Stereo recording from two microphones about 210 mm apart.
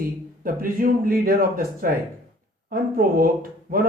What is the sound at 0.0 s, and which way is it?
Speech, 45° right (ahead or behind).